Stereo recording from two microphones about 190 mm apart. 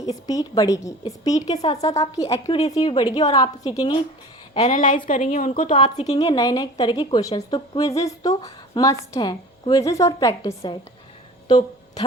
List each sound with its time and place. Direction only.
0.0 s a woman's voice: 20° left (ahead or behind)
1.6 s a woman's voice: 35° left (ahead or behind)
1.9 s a woman's voice: 15° left (ahead or behind)
4.6 s a woman's voice: 40° left (ahead or behind)
5.7 s a woman's voice: 25° left (ahead or behind)
11.4 s a sound: 25° left (ahead or behind)